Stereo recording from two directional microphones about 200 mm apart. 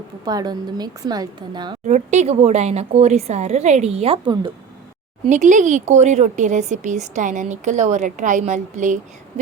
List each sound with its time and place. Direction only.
0.3 s a woman's voice: 20° right (ahead or behind)
1.9 s a woman's voice: 35° right (ahead or behind)
5.3 s a woman's voice: 40° right (ahead or behind)